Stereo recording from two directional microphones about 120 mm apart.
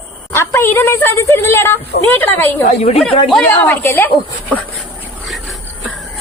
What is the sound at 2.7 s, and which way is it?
Speech, 60° left (ahead or behind).